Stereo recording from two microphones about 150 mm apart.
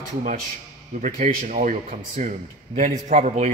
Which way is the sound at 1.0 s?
60° right (ahead or behind).